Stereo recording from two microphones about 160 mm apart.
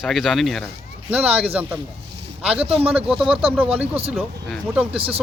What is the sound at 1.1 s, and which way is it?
Speech, 10° right (ahead or behind).